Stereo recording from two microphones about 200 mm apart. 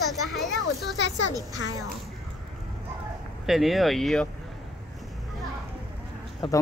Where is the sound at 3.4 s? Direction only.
Centre (ahead or behind).